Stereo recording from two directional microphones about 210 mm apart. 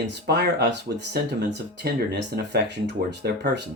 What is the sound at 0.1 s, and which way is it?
Speech, 50° right (ahead or behind).